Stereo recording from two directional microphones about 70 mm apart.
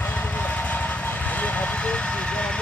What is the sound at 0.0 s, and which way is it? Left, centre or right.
Vehicle, left.